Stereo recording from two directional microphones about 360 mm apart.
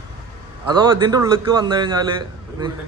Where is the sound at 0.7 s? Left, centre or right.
Centre.